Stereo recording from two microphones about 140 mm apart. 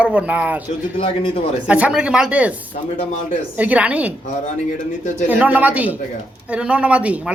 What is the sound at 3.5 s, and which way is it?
Speech, 10° right (ahead or behind).